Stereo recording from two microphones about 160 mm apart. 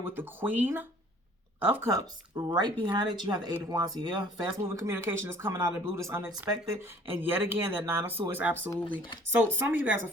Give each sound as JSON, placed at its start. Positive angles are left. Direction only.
{"t": 0.0, "sound": "speech", "side_deg": -15}
{"t": 2.5, "sound": "speech", "side_deg": -25}